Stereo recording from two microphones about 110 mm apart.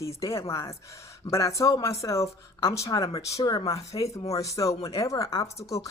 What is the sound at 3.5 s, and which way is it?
Speech, 45° left (ahead or behind).